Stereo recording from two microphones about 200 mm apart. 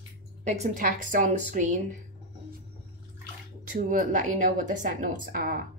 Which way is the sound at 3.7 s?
40° right (ahead or behind).